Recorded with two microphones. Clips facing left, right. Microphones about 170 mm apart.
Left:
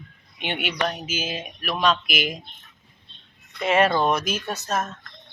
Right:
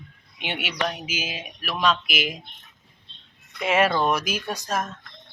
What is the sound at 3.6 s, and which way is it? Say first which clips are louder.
Speech: left 1 dB; 5° right (ahead or behind).